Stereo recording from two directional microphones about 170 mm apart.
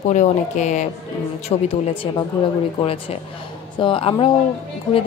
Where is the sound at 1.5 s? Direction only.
30° left (ahead or behind).